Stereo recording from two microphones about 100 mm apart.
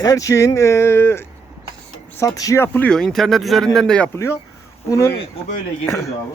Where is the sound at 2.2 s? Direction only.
35° left (ahead or behind).